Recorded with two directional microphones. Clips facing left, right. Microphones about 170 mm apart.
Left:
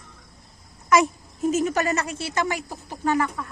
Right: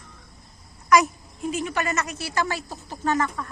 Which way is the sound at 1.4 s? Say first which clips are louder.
Left 5 dB; 45° left (ahead or behind).